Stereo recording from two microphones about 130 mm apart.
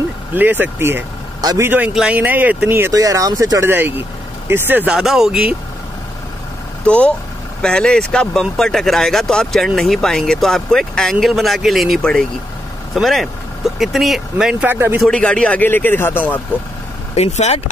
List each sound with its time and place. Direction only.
0.3 s speech: 15° right (ahead or behind)
4.9 s speech: 5° right (ahead or behind)
6.8 s a man's voice: 10° left (ahead or behind); by 15.0 s 15° right (ahead or behind)
15.0 s a man's voice: 5° left (ahead or behind)
17.1 s speech: 60° left (ahead or behind)